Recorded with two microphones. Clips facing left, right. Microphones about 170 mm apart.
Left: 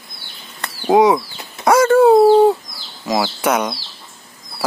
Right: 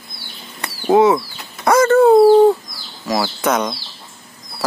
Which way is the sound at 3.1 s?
15° left (ahead or behind).